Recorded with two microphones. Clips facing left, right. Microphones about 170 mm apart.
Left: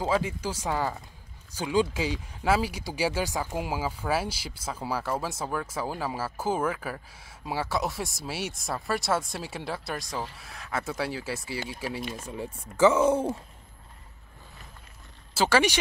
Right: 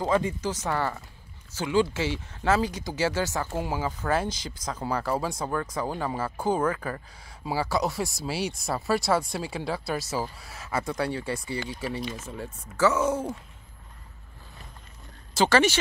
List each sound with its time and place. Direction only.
0.0 s speech: 5° left (ahead or behind)
12.9 s speech: 25° left (ahead or behind)
15.3 s speech: 10° left (ahead or behind)